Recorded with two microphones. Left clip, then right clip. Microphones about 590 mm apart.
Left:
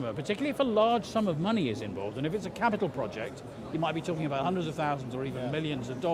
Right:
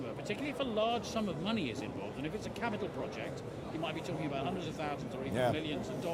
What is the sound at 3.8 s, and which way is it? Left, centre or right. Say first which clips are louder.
Speech: left 7 dB; left.